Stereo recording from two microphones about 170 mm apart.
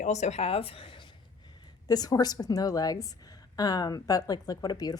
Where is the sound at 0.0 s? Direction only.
40° left (ahead or behind).